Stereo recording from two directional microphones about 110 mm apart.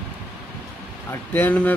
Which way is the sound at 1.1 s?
20° left (ahead or behind).